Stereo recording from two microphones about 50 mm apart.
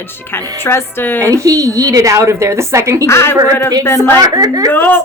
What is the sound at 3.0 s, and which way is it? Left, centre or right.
A woman's voice, left.